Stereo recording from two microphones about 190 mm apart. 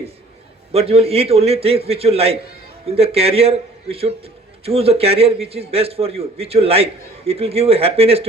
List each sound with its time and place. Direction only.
0.7 s a man's voice: 30° right (ahead or behind)